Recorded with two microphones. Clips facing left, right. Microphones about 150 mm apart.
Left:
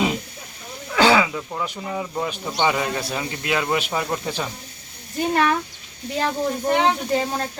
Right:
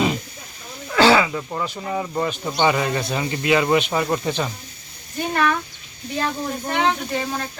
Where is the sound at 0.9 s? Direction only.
15° left (ahead or behind).